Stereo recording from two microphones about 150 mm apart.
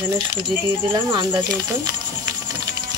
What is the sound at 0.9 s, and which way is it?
Speech, 30° right (ahead or behind).